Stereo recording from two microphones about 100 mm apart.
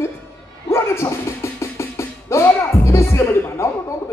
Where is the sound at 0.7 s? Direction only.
25° left (ahead or behind).